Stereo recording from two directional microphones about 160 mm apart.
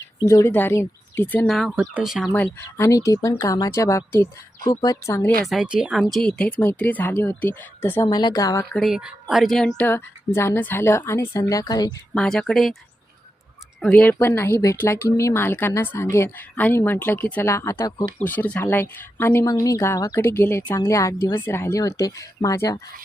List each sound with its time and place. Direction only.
0.3 s speech: 15° left (ahead or behind)
1.5 s speech: centre (ahead or behind)
2.3 s speech: 15° left (ahead or behind)
5.5 s speech: 5° right (ahead or behind); by 8.6 s 20° left (ahead or behind)
8.7 s speech: centre (ahead or behind); by 11.9 s 25° left (ahead or behind)
12.1 s speech: 5° left (ahead or behind)
13.8 s speech: 10° left (ahead or behind)